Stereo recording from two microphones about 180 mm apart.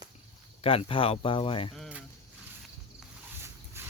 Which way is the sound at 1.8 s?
5° right (ahead or behind).